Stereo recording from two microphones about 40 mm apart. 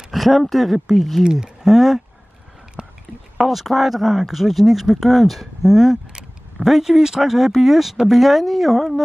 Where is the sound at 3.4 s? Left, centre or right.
Centre.